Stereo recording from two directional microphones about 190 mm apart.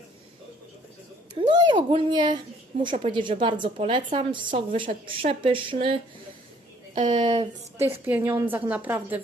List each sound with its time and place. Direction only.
1.4 s a sound: 25° right (ahead or behind)
1.9 s a woman's voice: 25° right (ahead or behind)
7.2 s a woman's voice: 25° right (ahead or behind)
7.8 s a woman's voice: 10° right (ahead or behind)